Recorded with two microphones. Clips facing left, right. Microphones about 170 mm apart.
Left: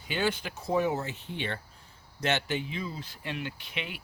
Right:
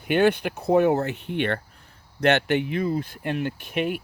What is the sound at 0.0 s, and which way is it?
Speech, 60° right (ahead or behind).